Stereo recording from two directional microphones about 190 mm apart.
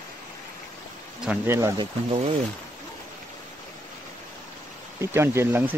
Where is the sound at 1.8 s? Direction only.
30° right (ahead or behind).